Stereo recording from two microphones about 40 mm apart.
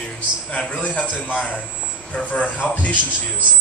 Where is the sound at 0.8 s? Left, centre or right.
Left.